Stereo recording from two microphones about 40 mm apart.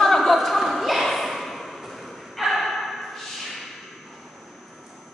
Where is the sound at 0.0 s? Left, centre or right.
Centre.